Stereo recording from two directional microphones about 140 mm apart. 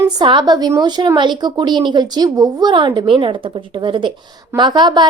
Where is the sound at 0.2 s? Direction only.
30° right (ahead or behind).